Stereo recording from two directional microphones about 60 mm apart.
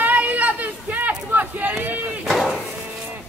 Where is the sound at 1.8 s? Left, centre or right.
Right.